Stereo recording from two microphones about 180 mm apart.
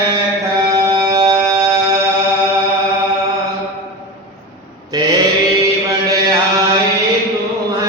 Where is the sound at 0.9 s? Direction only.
20° right (ahead or behind).